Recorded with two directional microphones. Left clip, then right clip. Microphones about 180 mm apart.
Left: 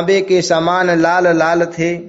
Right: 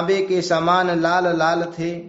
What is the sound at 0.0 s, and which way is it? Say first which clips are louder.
A man's voice: left 6 dB; 35° left (ahead or behind).